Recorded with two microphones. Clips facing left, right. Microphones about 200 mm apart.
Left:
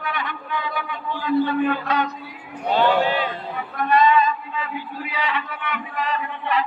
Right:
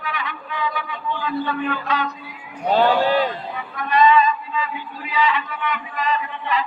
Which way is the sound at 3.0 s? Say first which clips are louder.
Right 4 dB; 40° right (ahead or behind).